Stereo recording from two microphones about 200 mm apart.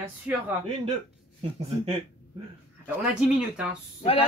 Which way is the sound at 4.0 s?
30° left (ahead or behind).